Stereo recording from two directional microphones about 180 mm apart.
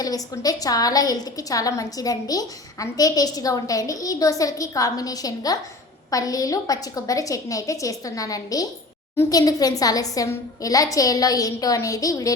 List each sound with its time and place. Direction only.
0.0 s a woman's voice: 20° left (ahead or behind)